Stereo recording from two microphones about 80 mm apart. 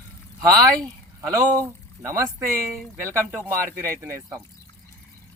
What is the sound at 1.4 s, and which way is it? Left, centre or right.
Speech, right.